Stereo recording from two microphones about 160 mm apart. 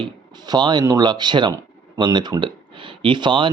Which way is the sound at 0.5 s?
25° right (ahead or behind).